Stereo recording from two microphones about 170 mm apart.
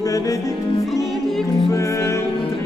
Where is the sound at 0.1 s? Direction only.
20° left (ahead or behind).